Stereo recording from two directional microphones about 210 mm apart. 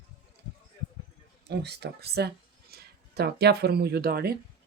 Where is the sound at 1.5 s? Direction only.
50° right (ahead or behind).